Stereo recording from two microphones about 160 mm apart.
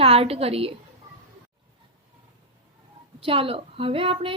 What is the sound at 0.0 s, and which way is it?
Speech, 35° right (ahead or behind).